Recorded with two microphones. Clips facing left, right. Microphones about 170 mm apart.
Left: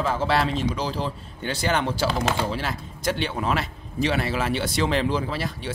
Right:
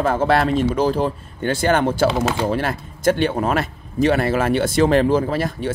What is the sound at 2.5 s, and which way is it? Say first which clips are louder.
A man's voice: right 7 dB; 55° right (ahead or behind).